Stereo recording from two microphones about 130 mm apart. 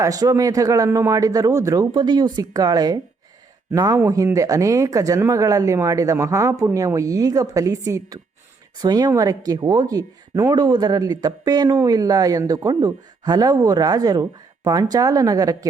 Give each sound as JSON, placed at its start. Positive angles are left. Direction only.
{"t": 0.0, "sound": "speech", "side_deg": -25}